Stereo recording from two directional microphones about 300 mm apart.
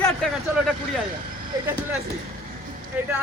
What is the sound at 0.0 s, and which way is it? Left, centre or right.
Vehicle, centre.